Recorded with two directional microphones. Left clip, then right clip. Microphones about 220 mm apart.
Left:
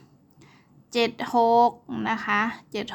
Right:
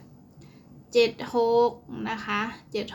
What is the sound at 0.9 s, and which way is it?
Speech, 30° left (ahead or behind).